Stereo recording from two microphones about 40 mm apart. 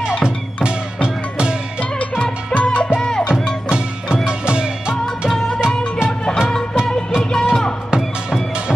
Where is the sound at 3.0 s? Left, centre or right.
Centre.